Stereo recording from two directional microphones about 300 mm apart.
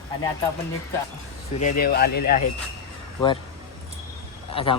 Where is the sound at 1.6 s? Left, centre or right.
Left.